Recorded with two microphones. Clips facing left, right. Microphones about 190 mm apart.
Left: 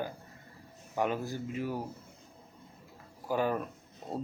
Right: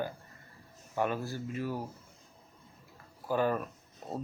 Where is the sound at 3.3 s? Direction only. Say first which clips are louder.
Right 1 dB; 15° left (ahead or behind).